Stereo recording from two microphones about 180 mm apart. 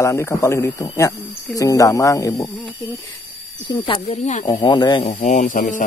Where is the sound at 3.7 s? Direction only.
30° left (ahead or behind).